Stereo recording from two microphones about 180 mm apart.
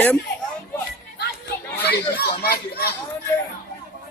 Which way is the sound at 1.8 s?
65° left (ahead or behind).